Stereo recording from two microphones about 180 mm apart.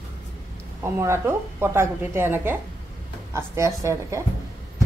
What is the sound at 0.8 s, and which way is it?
A woman's voice, 15° right (ahead or behind).